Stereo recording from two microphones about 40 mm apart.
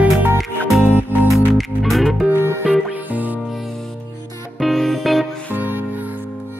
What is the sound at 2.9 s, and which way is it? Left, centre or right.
Music, right.